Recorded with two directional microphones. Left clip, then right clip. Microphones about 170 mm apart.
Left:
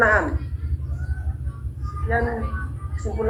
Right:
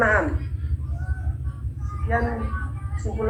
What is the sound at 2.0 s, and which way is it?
Speech, 20° left (ahead or behind).